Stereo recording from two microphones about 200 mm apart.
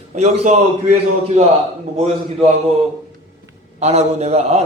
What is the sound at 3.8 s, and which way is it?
Speech, 35° right (ahead or behind).